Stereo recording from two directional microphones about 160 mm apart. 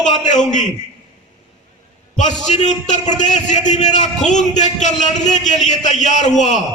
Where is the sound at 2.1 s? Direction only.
50° left (ahead or behind).